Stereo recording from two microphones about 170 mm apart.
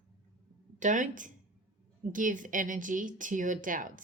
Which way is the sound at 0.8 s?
50° right (ahead or behind).